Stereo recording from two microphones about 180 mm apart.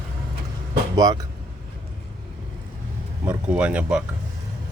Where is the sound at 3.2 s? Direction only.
10° right (ahead or behind).